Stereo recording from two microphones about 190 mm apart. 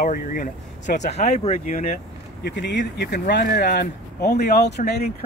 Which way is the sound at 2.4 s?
65° left (ahead or behind).